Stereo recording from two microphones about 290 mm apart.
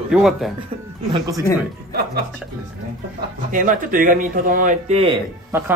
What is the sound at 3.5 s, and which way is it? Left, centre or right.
Speech, right.